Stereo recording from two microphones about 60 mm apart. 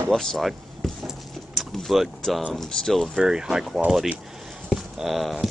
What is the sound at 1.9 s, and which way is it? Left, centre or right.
Speech, centre.